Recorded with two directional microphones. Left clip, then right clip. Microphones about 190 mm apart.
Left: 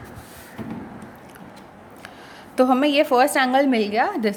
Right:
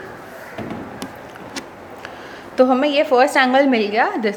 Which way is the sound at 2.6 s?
45° left (ahead or behind).